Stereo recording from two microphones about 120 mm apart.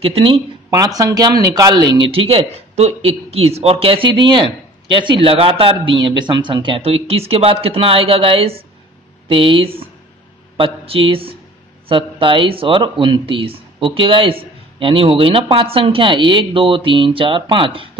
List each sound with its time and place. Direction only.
0.0 s a man's voice: 50° right (ahead or behind)
0.7 s speech: 30° right (ahead or behind)
2.0 s a man's voice: 50° right (ahead or behind)